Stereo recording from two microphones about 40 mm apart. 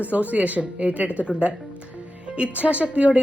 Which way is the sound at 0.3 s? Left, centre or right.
Right.